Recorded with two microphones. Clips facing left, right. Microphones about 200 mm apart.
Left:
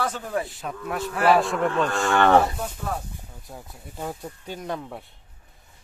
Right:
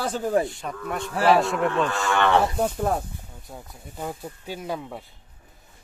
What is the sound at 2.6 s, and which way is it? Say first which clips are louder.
Speech: right 7 dB; 50° right (ahead or behind).